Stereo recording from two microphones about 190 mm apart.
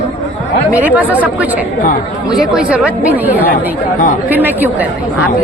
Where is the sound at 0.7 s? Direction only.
10° right (ahead or behind).